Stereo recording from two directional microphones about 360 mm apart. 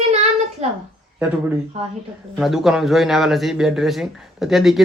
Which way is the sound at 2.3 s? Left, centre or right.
Centre.